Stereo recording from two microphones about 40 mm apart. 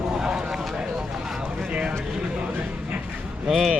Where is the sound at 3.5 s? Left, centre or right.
Centre.